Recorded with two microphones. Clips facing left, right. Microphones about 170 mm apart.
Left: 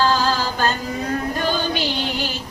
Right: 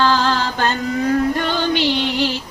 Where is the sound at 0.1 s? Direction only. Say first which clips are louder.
Right 2 dB; 70° right (ahead or behind).